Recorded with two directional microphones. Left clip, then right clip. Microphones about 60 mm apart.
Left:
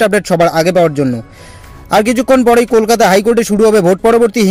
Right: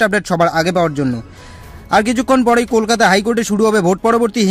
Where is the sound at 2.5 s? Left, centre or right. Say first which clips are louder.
Left 5 dB; centre.